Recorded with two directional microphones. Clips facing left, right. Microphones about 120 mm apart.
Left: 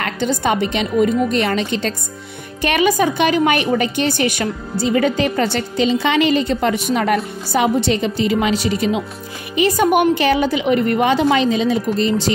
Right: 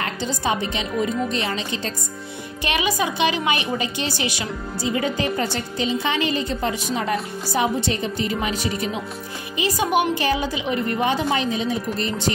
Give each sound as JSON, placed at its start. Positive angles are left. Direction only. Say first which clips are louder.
{"t": 0.0, "sound": "a woman's voice", "louder": "left 6 dB", "side_deg": 60}
{"t": 2.6, "sound": "a woman's voice", "louder": "left 7 dB", "side_deg": 50}
{"t": 9.6, "sound": "speech", "louder": "left 6 dB", "side_deg": 55}